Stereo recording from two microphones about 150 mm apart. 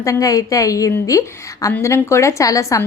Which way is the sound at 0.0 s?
20° left (ahead or behind).